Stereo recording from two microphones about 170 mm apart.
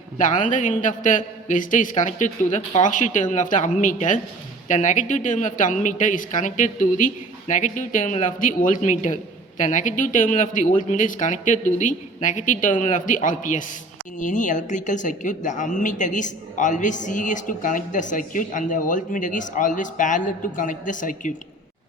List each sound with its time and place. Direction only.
0.2 s a woman's voice: 50° left (ahead or behind)